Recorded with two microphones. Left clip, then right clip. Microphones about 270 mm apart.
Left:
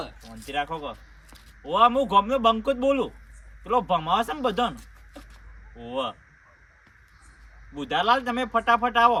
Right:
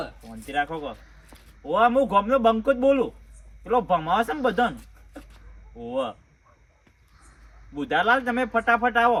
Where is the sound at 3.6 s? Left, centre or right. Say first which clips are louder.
Right 1 dB; left.